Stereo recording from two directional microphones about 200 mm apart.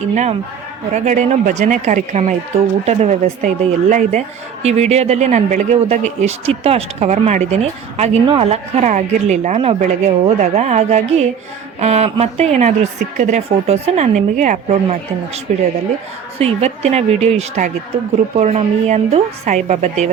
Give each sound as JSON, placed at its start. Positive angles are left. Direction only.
{"t": 0.1, "sound": "speech", "side_deg": -35}
{"t": 16.4, "sound": "speech", "side_deg": -30}